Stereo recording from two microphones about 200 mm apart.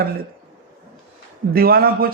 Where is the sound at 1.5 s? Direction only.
50° right (ahead or behind).